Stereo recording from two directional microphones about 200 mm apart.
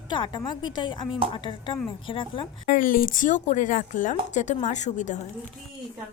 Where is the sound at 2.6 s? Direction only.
40° left (ahead or behind).